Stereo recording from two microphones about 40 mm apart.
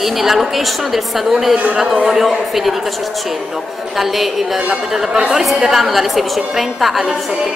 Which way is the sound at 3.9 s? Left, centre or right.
Centre.